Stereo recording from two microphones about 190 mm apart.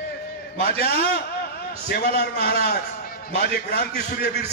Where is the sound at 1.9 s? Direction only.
55° left (ahead or behind).